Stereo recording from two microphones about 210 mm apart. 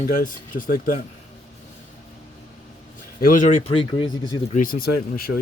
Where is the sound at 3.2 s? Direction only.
35° left (ahead or behind).